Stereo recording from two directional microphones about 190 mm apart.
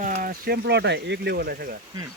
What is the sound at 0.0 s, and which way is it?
Speech, 45° right (ahead or behind).